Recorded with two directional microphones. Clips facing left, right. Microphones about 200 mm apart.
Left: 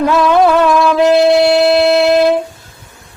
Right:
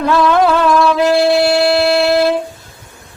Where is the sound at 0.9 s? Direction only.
20° left (ahead or behind).